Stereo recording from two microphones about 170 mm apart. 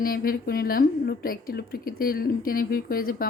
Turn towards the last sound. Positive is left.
turn(degrees=60)  # may be behind; listen again after turning